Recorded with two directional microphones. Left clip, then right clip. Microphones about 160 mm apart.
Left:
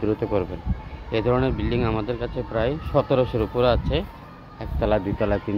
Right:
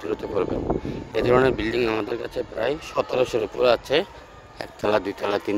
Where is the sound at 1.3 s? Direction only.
90° right.